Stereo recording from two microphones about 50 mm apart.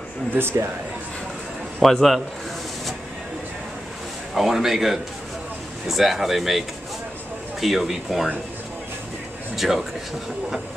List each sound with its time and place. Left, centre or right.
0.3 s speech: right
1.8 s speech: centre
4.3 s speech: centre
7.6 s speech: centre
9.6 s speech: centre